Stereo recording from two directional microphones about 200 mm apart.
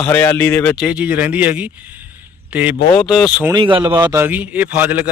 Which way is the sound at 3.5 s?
25° right (ahead or behind).